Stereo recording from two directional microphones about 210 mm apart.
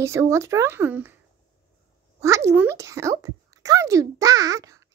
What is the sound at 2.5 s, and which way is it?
A child's voice, 15° right (ahead or behind).